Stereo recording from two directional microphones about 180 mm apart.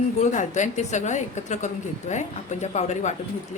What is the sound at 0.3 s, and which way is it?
A woman's voice, 40° left (ahead or behind).